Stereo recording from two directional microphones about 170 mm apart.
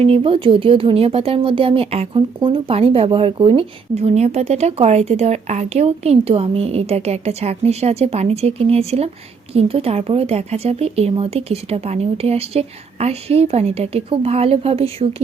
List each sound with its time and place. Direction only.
0.0 s speech: 35° right (ahead or behind)